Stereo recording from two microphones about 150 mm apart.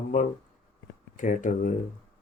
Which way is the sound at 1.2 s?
60° left (ahead or behind).